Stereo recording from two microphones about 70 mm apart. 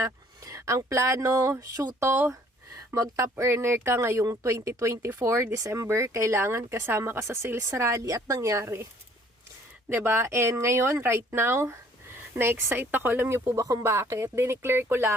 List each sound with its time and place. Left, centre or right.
0.0 s a sound: right
0.9 s speech: right
9.9 s speech: right
13.5 s speech: right
13.9 s speech: right